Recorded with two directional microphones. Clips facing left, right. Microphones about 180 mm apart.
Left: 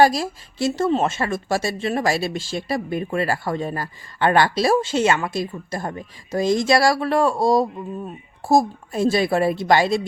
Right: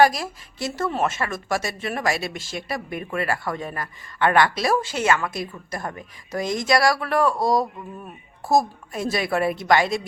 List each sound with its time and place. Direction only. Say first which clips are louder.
0.0 s speech: left 2 dB; 25° left (ahead or behind)